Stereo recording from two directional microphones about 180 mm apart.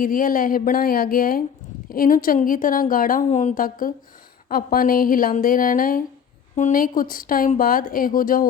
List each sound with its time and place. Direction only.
0.0 s a woman's voice: 50° left (ahead or behind)